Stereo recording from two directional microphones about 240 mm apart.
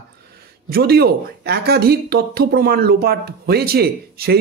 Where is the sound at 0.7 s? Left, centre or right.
Right.